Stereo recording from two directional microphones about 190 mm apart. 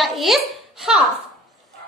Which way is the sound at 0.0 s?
Centre (ahead or behind).